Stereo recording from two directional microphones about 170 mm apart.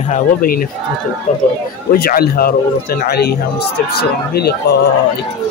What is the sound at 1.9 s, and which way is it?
A man's voice, 65° left (ahead or behind).